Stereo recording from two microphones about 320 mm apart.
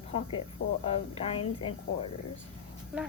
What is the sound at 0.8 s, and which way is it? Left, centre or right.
Speech, centre.